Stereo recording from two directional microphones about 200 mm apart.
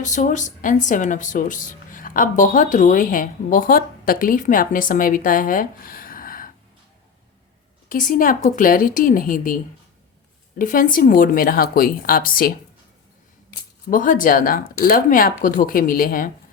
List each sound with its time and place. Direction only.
0.0 s speech: 40° left (ahead or behind)
7.9 s speech: 40° left (ahead or behind)
10.6 s speech: 45° left (ahead or behind)
13.9 s speech: 40° left (ahead or behind)